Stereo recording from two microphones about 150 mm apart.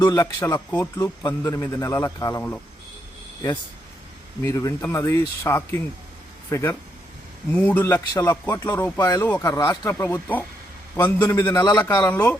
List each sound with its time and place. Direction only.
0.0 s speech: 25° left (ahead or behind)
4.4 s speech: 20° left (ahead or behind)